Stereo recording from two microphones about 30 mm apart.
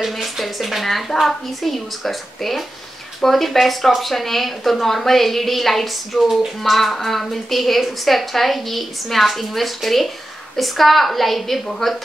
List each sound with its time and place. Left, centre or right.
0.0 s a woman's voice: centre
6.2 s a woman's voice: centre